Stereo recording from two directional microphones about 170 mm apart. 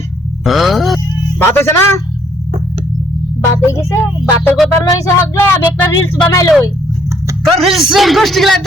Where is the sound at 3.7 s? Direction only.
15° left (ahead or behind).